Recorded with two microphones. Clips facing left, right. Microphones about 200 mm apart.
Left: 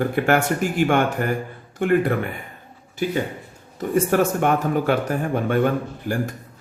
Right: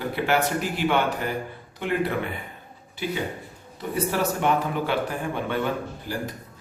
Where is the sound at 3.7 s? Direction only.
50° left (ahead or behind).